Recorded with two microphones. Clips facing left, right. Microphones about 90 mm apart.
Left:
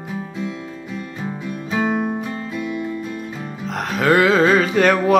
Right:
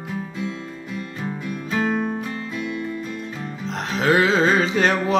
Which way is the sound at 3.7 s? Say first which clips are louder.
Left 3 dB; 55° left (ahead or behind).